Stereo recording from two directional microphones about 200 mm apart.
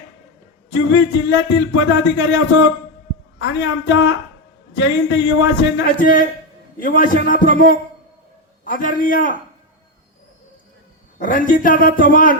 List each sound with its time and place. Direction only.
0.7 s speech: 65° left (ahead or behind)
6.7 s a man's voice: 45° left (ahead or behind)
8.6 s a man's voice: 45° left (ahead or behind)
11.2 s a man's voice: 40° left (ahead or behind)